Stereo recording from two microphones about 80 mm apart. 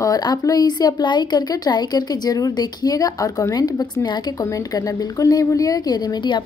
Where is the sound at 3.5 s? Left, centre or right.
Left.